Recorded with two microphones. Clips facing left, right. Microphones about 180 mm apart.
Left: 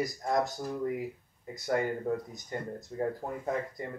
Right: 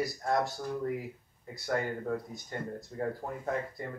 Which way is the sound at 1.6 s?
15° left (ahead or behind).